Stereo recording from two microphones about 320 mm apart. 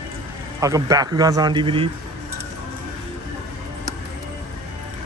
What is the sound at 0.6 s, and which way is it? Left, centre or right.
Speech, centre.